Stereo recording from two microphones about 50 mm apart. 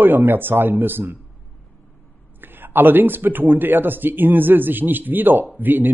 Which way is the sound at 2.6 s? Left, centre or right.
Right.